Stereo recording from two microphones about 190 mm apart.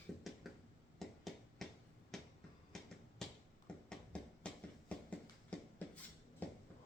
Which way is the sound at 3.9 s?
5° left (ahead or behind).